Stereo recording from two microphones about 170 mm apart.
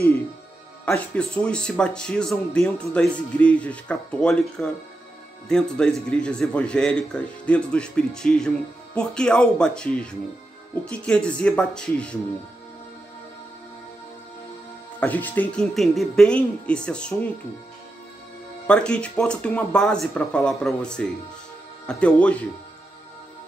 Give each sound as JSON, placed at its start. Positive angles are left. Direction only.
{"t": 0.8, "sound": "speech", "side_deg": 5}
{"t": 15.0, "sound": "speech", "side_deg": 10}
{"t": 18.7, "sound": "speech", "side_deg": 5}